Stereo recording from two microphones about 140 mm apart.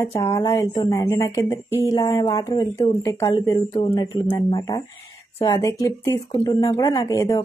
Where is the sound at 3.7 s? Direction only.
40° left (ahead or behind).